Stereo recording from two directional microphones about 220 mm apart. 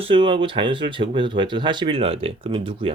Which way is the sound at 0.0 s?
25° right (ahead or behind).